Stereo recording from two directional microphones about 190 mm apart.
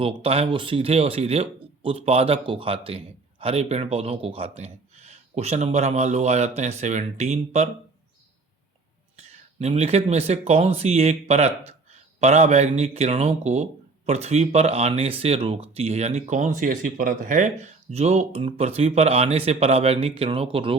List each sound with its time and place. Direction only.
0.0 s speech: 30° right (ahead or behind)
9.1 s speech: 35° right (ahead or behind)